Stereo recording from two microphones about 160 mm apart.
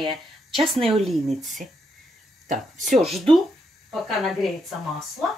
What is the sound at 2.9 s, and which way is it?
Speech, centre (ahead or behind).